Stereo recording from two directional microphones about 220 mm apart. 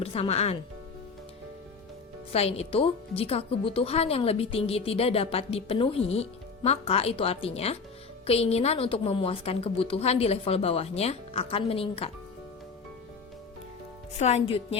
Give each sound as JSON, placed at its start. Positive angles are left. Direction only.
{"t": 0.0, "sound": "speech", "side_deg": 25}
{"t": 2.3, "sound": "speech", "side_deg": 25}
{"t": 14.2, "sound": "speech", "side_deg": 30}